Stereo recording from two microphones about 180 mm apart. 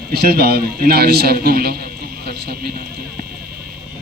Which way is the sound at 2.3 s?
60° right (ahead or behind).